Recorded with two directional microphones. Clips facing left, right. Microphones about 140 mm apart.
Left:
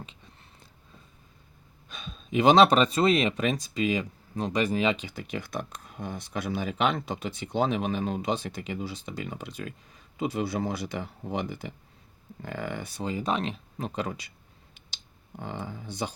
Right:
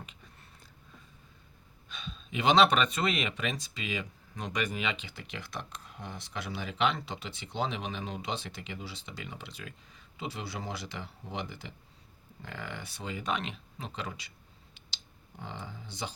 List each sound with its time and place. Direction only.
1.9 s speech: 45° left (ahead or behind)
15.4 s speech: 55° left (ahead or behind)